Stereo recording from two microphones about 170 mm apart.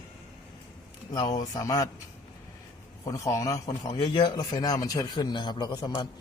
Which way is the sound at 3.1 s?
20° left (ahead or behind).